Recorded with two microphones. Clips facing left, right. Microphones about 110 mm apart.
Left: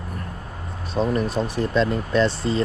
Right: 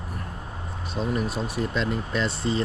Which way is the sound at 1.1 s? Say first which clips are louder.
Left 4 dB; 5° right (ahead or behind).